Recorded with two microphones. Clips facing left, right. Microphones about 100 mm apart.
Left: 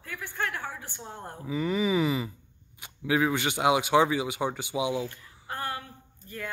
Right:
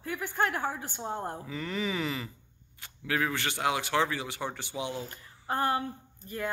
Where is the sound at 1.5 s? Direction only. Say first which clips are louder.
Left 10 dB; 10° left (ahead or behind).